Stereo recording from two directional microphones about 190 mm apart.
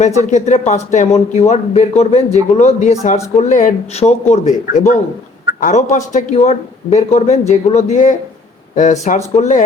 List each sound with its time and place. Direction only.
0.0 s speech: 40° left (ahead or behind)